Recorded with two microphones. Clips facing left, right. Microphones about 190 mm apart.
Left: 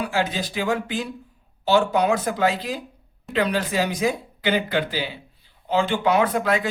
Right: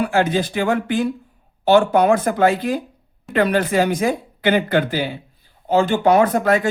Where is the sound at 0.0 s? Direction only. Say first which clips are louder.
Right 6 dB; 55° right (ahead or behind).